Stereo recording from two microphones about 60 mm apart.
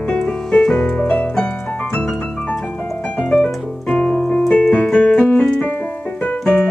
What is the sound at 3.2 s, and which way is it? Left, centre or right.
Keyboard, centre.